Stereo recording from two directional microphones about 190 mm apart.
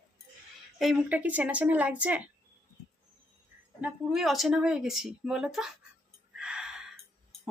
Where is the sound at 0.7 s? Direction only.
Centre (ahead or behind).